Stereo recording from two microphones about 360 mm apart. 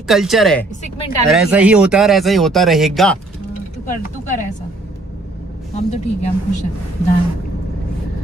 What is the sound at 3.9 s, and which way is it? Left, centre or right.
Speech, left.